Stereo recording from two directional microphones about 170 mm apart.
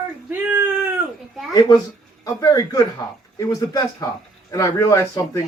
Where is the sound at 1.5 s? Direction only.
25° left (ahead or behind).